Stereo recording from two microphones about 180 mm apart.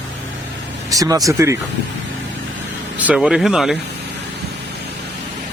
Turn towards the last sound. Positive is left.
turn(degrees=0)  # may be behind; listen again after turning